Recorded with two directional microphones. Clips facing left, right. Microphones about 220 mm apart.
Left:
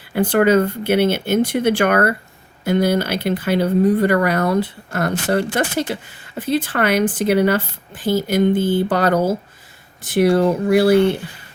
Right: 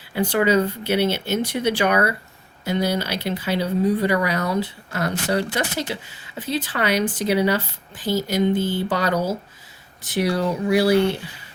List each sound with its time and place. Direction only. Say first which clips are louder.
0.1 s speech: left 5 dB; 55° left (ahead or behind)